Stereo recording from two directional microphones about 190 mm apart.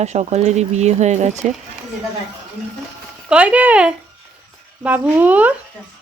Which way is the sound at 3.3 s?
5° right (ahead or behind).